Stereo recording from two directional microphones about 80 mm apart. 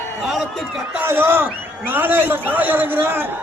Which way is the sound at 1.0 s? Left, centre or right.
Right.